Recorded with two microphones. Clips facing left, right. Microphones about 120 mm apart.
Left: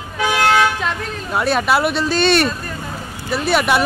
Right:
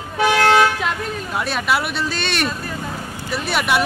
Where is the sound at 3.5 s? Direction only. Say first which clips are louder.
Left 3 dB; 40° left (ahead or behind).